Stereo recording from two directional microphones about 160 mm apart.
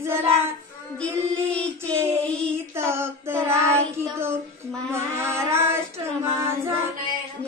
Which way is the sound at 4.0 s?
15° right (ahead or behind).